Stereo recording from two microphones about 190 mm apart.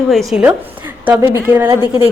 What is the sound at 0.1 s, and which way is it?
A woman's voice, centre (ahead or behind).